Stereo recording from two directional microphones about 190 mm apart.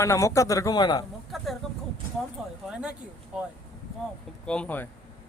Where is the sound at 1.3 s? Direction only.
Centre (ahead or behind).